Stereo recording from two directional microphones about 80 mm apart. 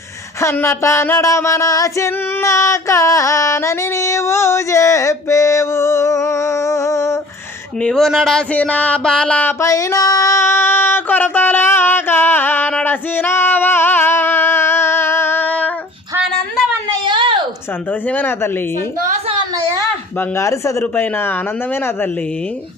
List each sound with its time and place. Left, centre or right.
0.3 s music: left
7.8 s speech: centre
8.5 s music: centre
9.6 s music: left
10.4 s a sound: left
17.0 s a sound: right
18.0 s a man's voice: left
20.1 s music: left
20.8 s a man's voice: left